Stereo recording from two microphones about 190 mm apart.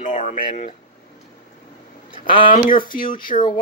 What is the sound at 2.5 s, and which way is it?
Speech, 45° left (ahead or behind).